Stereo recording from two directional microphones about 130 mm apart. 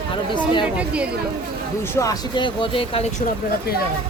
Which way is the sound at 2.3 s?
40° left (ahead or behind).